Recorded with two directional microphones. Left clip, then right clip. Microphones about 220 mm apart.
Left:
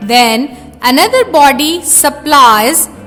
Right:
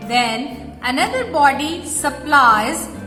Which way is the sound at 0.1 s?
50° left (ahead or behind).